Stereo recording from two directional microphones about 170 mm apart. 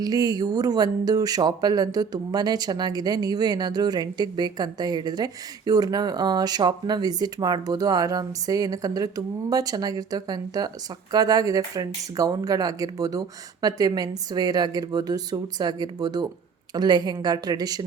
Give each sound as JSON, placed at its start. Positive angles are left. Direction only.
{"t": 0.0, "sound": "speech", "side_deg": -20}